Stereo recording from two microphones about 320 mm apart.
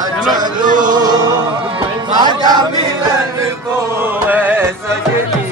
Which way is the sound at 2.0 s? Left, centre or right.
Centre.